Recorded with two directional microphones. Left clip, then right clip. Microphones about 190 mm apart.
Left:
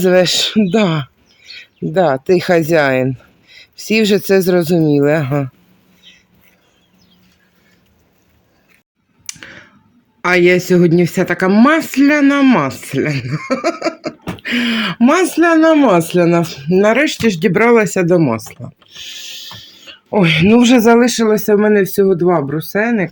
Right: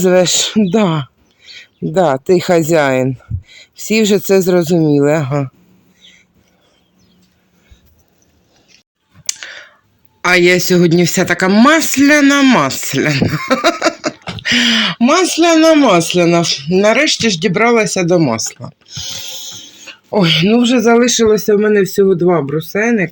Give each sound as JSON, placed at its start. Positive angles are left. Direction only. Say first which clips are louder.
{"t": 0.0, "sound": "speech", "louder": "even", "side_deg": 0}
{"t": 9.2, "sound": "a sound", "louder": "right 7 dB", "side_deg": 0}
{"t": 10.2, "sound": "speech", "louder": "right 1 dB", "side_deg": 5}
{"t": 14.3, "sound": "a sound", "louder": "right 6 dB", "side_deg": 0}
{"t": 14.9, "sound": "speech", "louder": "right 1 dB", "side_deg": 15}
{"t": 18.9, "sound": "music", "louder": "right 4 dB", "side_deg": -10}
{"t": 20.1, "sound": "speech", "louder": "even", "side_deg": 10}